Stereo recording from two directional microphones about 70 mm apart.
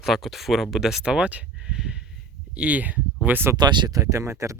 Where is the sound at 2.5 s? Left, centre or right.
Centre.